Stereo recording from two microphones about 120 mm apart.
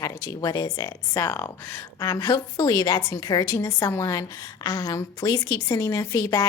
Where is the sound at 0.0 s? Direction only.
30° left (ahead or behind).